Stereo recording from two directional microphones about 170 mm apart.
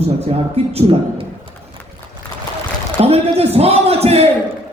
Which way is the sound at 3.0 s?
35° right (ahead or behind).